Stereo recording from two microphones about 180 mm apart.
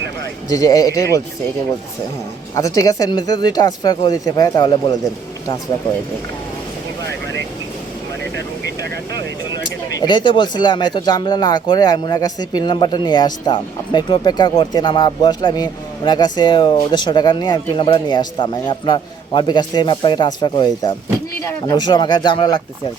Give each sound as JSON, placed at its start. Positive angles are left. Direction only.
{"t": 0.5, "sound": "speech", "side_deg": 20}
{"t": 2.6, "sound": "speech", "side_deg": 20}
{"t": 8.8, "sound": "vehicle", "side_deg": -70}
{"t": 10.0, "sound": "speech", "side_deg": 25}